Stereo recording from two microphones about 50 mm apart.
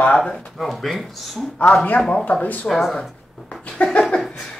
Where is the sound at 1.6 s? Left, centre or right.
Left.